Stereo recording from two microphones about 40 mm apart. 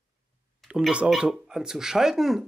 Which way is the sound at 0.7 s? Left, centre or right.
Right.